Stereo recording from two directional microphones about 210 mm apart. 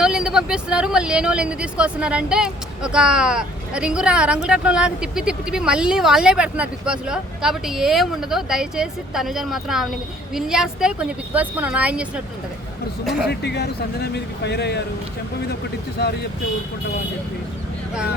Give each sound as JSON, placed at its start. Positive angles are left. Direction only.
{"t": 0.0, "sound": "speech", "side_deg": -5}
{"t": 13.2, "sound": "speech", "side_deg": 50}